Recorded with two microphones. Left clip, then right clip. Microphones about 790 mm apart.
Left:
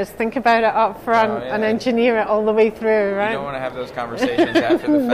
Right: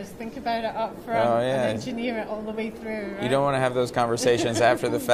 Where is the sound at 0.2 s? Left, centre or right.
Left.